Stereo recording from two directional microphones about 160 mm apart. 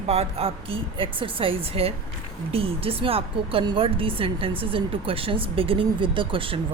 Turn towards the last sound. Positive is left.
turn(degrees=-35)  # may be behind; listen again after turning